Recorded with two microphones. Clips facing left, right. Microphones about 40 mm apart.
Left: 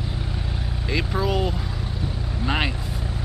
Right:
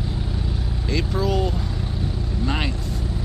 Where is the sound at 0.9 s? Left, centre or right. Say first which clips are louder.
Right 1 dB; centre.